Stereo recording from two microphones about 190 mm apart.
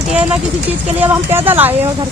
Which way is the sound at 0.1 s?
10° right (ahead or behind).